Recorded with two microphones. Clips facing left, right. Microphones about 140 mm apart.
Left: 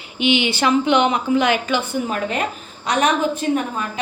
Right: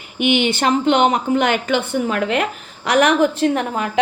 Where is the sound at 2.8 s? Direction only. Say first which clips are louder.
Right 4 dB; 80° right.